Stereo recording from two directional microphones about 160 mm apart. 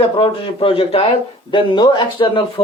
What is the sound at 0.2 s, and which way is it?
A man's voice, 35° left (ahead or behind).